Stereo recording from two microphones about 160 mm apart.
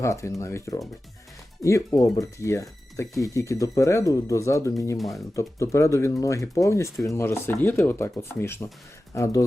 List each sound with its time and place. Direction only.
0.0 s speech: 20° left (ahead or behind)
4.9 s speech: centre (ahead or behind)
5.4 s speech: 20° left (ahead or behind)